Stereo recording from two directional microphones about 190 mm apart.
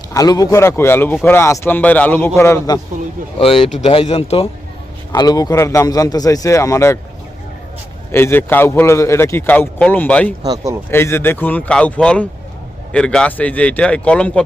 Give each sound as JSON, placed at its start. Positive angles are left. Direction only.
{"t": 0.1, "sound": "speech", "side_deg": 20}
{"t": 3.3, "sound": "speech", "side_deg": 30}
{"t": 5.1, "sound": "speech", "side_deg": 20}
{"t": 8.1, "sound": "speech", "side_deg": 10}
{"t": 10.4, "sound": "speech", "side_deg": -20}
{"t": 10.9, "sound": "speech", "side_deg": 10}